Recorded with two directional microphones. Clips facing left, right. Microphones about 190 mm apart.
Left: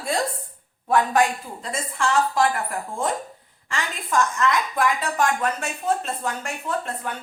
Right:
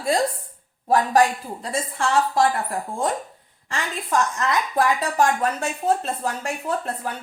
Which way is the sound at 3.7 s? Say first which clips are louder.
Right 2 dB; 35° right (ahead or behind).